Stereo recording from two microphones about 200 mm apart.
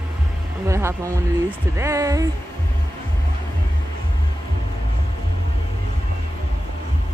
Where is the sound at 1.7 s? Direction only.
15° right (ahead or behind).